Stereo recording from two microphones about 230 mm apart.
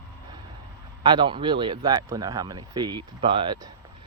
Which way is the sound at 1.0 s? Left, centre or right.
Centre.